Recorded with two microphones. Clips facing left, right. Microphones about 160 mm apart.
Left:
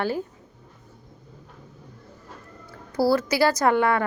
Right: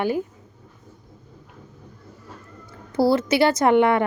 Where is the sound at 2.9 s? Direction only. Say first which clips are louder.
Right 3 dB; 25° right (ahead or behind).